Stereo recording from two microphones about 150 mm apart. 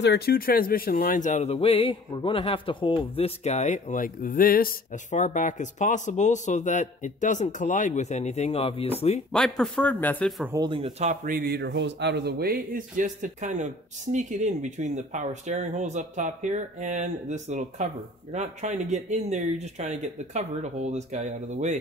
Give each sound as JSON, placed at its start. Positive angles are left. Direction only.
{"t": 0.1, "sound": "speech", "side_deg": 90}
{"t": 9.3, "sound": "speech", "side_deg": 5}
{"t": 10.5, "sound": "speech", "side_deg": -30}
{"t": 11.2, "sound": "speech", "side_deg": -85}